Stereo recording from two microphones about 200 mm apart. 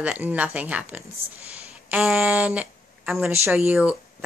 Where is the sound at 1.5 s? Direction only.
5° right (ahead or behind).